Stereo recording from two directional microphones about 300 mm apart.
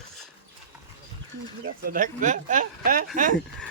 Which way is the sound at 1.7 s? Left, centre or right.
Right.